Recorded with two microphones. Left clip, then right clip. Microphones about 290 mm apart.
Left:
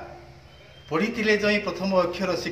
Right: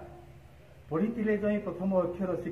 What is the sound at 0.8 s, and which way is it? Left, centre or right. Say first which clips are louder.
A man's voice: left 7 dB; centre.